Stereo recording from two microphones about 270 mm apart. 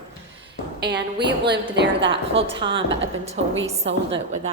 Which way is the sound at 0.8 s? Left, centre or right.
Right.